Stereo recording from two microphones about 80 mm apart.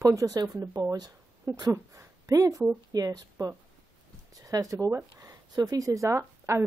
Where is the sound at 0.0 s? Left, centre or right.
Right.